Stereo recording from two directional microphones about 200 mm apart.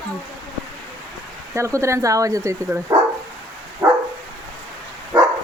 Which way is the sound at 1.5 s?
15° right (ahead or behind).